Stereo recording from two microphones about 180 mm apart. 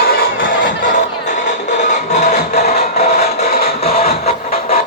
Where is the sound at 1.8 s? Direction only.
40° left (ahead or behind).